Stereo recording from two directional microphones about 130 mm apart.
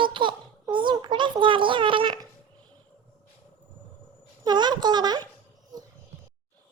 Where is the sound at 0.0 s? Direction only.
40° right (ahead or behind).